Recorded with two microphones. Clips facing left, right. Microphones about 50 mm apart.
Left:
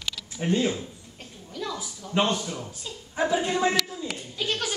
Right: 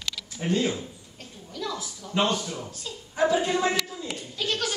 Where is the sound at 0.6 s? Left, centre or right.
Centre.